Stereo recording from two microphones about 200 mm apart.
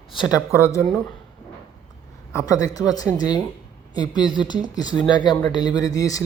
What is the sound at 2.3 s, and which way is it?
Speech, 15° left (ahead or behind).